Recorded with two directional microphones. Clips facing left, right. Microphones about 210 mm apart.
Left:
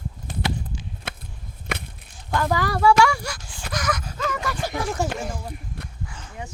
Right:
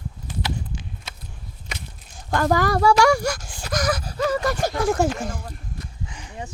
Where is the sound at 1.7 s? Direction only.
60° left (ahead or behind).